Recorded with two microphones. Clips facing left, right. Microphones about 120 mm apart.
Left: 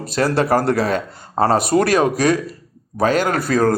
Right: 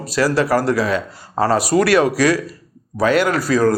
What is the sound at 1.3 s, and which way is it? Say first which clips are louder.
Speech: left 1 dB; 30° left (ahead or behind).